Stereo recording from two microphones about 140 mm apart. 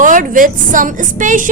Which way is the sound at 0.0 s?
70° right (ahead or behind).